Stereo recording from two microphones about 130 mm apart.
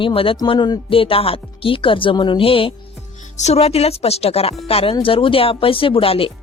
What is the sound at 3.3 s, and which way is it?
Speech, 55° left (ahead or behind).